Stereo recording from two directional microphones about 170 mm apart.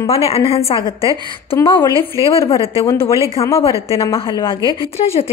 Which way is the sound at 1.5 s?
15° left (ahead or behind).